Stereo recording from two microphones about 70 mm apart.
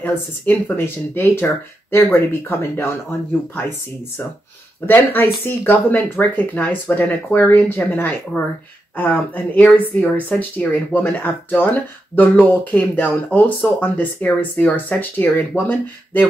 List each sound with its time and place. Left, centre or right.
0.0 s speech: left
4.8 s speech: left